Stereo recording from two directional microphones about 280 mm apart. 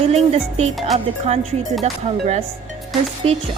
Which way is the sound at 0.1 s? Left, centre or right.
Right.